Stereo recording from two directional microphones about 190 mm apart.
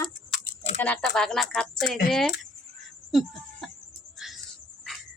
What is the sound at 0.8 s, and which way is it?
Speech, 5° left (ahead or behind).